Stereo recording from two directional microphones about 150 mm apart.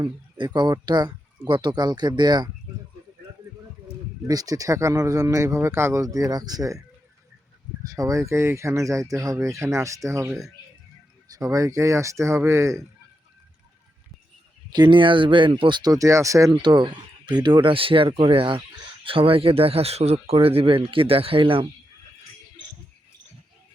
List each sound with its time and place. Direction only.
0.0 s speech: 30° right (ahead or behind)
4.3 s speech: 25° right (ahead or behind)
7.9 s speech: 20° right (ahead or behind)
14.7 s speech: 30° right (ahead or behind)